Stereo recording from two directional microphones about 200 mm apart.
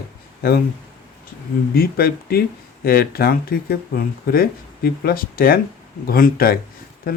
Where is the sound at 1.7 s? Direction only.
50° left (ahead or behind).